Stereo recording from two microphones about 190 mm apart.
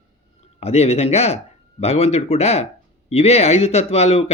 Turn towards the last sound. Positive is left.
turn(degrees=35)  # may be behind; listen again after turning